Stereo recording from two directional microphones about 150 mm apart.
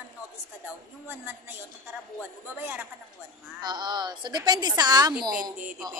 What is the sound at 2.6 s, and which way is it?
Speech, 10° right (ahead or behind).